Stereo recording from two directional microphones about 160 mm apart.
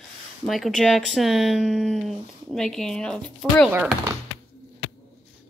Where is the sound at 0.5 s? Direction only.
Centre (ahead or behind).